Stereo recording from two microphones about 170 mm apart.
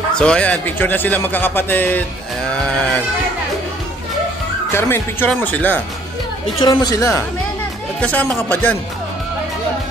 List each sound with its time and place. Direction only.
0.1 s a man's voice: 5° left (ahead or behind)
4.7 s a man's voice: 15° left (ahead or behind)
6.6 s a woman's voice: 25° left (ahead or behind)
8.0 s a man's voice: 10° left (ahead or behind)